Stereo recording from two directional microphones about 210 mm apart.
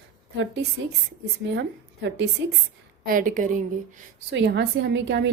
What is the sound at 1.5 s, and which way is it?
Speech, 55° right (ahead or behind).